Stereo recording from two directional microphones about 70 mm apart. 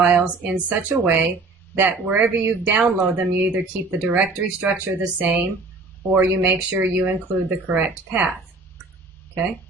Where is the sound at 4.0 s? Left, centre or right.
Right.